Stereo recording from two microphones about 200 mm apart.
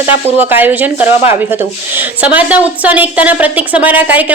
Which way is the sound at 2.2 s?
10° right (ahead or behind).